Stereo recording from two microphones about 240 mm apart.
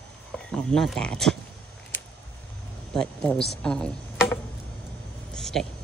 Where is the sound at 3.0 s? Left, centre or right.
Centre.